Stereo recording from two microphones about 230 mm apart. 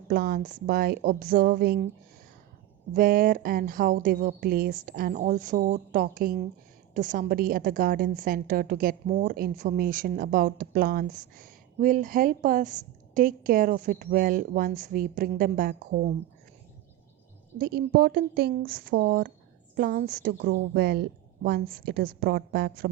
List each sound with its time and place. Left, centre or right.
0.1 s a woman's voice: right
2.9 s a woman's voice: right
17.6 s a woman's voice: right